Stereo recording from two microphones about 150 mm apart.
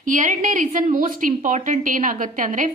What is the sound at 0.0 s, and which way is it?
A woman's voice, 60° right (ahead or behind).